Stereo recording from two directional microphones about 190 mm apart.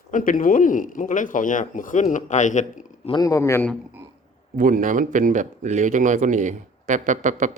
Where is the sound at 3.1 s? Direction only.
20° left (ahead or behind).